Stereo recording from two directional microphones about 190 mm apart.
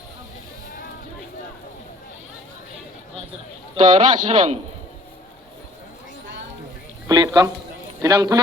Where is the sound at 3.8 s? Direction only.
40° right (ahead or behind).